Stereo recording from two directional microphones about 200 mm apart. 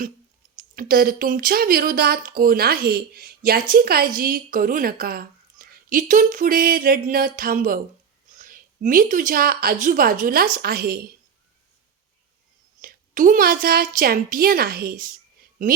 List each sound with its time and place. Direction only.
0.5 s speech: 45° right (ahead or behind)
12.8 s speech: 40° right (ahead or behind)